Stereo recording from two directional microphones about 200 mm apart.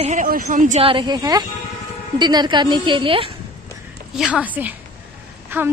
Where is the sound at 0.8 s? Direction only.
25° right (ahead or behind).